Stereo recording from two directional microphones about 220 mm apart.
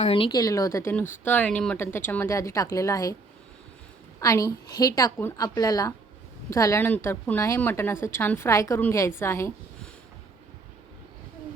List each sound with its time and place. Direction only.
0.0 s speech: 25° left (ahead or behind)
4.2 s speech: 15° left (ahead or behind)